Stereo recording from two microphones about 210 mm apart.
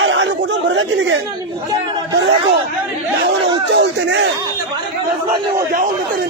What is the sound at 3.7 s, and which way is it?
Speech, 55° right (ahead or behind).